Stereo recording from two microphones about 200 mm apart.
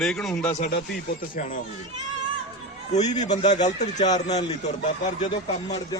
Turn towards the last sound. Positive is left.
turn(degrees=35)  # may be behind; listen again after turning